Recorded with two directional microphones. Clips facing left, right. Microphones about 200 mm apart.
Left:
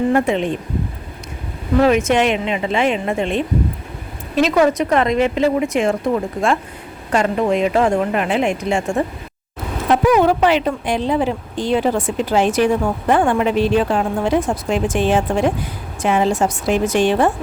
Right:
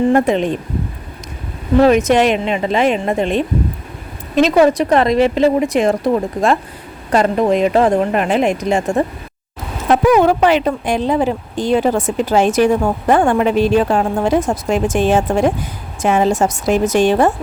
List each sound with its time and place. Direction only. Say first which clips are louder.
0.1 s speech: right 3 dB; 40° right (ahead or behind)
1.8 s speech: right 3 dB; 40° right (ahead or behind)
4.5 s speech: right 3 dB; 30° right (ahead or behind)
9.9 s speech: right 2 dB; 50° right (ahead or behind)